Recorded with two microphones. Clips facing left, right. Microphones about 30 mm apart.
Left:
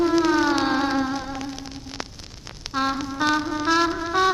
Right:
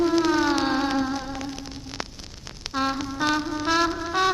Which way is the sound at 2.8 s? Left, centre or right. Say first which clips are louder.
Left 2 dB; centre.